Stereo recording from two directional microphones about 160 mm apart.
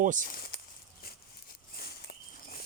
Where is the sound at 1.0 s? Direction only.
75° left (ahead or behind).